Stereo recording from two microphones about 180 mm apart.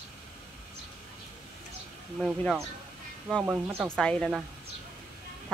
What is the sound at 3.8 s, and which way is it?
Speech, 5° left (ahead or behind).